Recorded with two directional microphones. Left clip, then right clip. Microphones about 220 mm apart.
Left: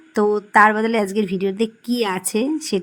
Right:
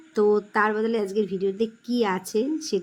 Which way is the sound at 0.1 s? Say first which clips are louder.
Left 5 dB; 30° left (ahead or behind).